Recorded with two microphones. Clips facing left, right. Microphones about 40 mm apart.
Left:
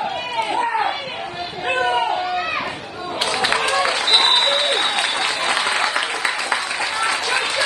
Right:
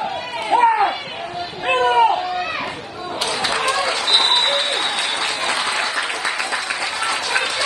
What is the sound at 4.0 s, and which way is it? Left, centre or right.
Applause, left.